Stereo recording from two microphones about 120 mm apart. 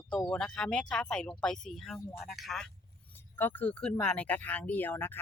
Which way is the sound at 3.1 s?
15° left (ahead or behind).